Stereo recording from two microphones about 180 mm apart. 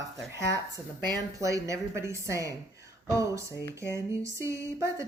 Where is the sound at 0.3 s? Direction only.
20° right (ahead or behind).